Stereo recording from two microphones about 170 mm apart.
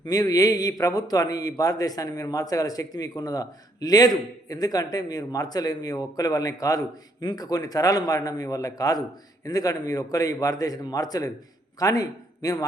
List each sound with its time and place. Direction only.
0.0 s a man's voice: 20° left (ahead or behind)